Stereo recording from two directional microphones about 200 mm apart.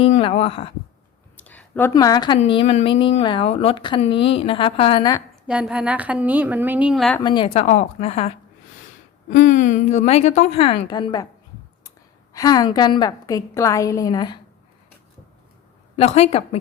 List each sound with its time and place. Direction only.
0.0 s a woman's voice: 30° left (ahead or behind)
1.4 s a woman's voice: 10° left (ahead or behind); by 5.1 s 25° left (ahead or behind)
5.5 s a woman's voice: 5° right (ahead or behind)
7.2 s a woman's voice: 25° left (ahead or behind)
9.3 s a woman's voice: 40° left (ahead or behind); by 11.3 s 20° left (ahead or behind)
12.3 s a woman's voice: 20° left (ahead or behind)
16.0 s a woman's voice: 30° left (ahead or behind)